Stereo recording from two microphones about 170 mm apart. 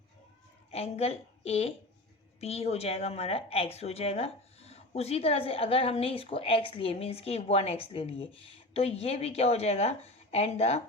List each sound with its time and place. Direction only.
0.7 s a woman's voice: 35° left (ahead or behind)